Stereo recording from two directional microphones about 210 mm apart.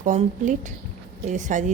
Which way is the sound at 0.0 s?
35° right (ahead or behind).